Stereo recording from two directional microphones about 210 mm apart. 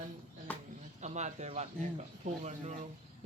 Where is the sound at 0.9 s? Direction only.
35° right (ahead or behind).